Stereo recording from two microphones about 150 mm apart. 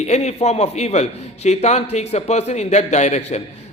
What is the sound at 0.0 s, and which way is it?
A man's voice, 50° left (ahead or behind).